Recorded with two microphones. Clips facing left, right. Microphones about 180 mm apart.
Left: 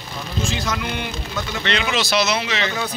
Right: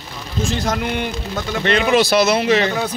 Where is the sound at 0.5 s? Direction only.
50° right (ahead or behind).